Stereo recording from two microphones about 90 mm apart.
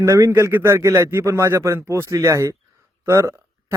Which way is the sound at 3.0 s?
30° right (ahead or behind).